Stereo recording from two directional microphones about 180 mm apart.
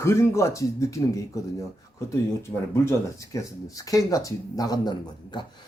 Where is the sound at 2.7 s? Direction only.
15° left (ahead or behind).